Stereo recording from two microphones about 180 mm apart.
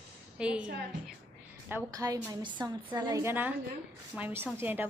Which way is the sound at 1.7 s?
15° right (ahead or behind).